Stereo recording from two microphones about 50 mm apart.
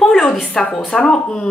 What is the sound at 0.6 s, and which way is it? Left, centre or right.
Speech, left.